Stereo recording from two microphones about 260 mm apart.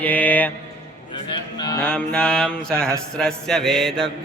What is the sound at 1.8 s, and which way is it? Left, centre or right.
Mantra, centre.